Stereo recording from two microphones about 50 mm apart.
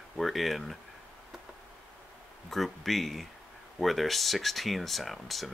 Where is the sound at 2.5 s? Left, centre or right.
Centre.